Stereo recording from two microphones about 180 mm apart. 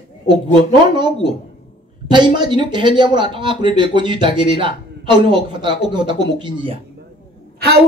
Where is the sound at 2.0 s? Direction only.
25° right (ahead or behind).